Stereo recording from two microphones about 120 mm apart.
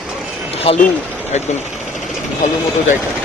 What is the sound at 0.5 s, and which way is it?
Vehicle, 55° left (ahead or behind).